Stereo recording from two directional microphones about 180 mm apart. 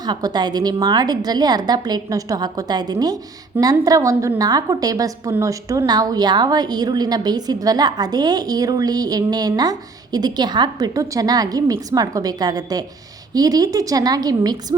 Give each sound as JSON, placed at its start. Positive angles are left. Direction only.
{"t": 0.0, "sound": "a woman's voice", "side_deg": -25}